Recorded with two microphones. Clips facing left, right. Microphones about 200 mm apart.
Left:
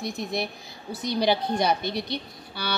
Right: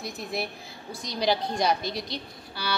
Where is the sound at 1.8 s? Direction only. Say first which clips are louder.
Left 3 dB; 60° left (ahead or behind).